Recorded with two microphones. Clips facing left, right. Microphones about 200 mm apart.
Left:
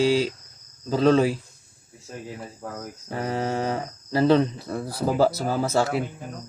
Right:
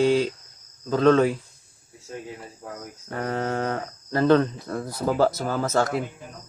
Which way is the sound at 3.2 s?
5° left (ahead or behind).